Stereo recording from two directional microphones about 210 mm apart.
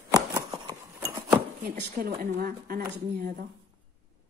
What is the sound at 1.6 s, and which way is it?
Speech, 45° right (ahead or behind).